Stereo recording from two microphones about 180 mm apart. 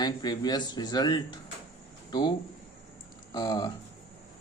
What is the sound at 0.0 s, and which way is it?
Speech, 25° left (ahead or behind).